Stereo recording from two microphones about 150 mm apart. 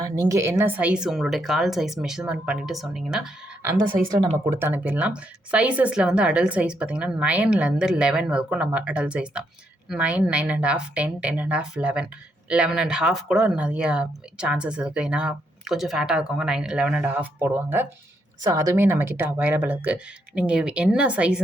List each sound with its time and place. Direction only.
0.0 s speech: 25° right (ahead or behind); by 3.2 s centre (ahead or behind)
3.6 s a woman's voice: 15° right (ahead or behind)
4.0 s speech: 30° right (ahead or behind)
4.4 s speech: 15° right (ahead or behind)